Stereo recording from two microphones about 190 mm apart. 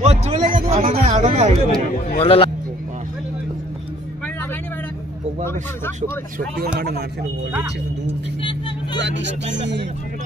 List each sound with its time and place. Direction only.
0.0 s speech: 35° right (ahead or behind)
2.1 s a man's voice: 30° left (ahead or behind)
5.4 s speech: 15° left (ahead or behind)
6.6 s speech: 55° right (ahead or behind)
8.9 s speech: 70° right (ahead or behind)